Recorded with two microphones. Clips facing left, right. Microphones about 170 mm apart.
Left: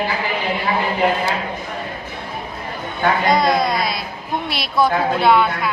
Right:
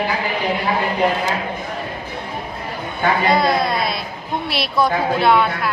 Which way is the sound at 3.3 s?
Centre (ahead or behind).